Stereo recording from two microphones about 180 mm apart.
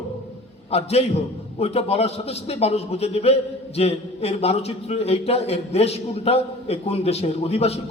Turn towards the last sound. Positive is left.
turn(degrees=35)  # may be behind; listen again after turning